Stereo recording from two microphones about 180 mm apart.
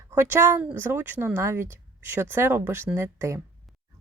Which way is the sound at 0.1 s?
15° right (ahead or behind).